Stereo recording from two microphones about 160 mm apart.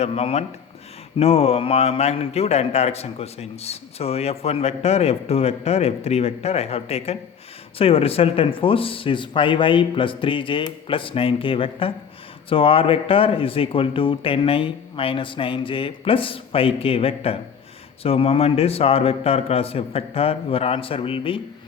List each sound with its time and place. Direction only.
0.0 s a man's voice: 40° left (ahead or behind)